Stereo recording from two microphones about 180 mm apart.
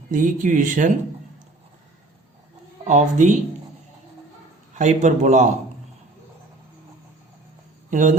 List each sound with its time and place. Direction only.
0.1 s speech: 45° right (ahead or behind)
2.8 s speech: 40° right (ahead or behind)
4.8 s speech: 40° right (ahead or behind)
7.9 s speech: 45° right (ahead or behind)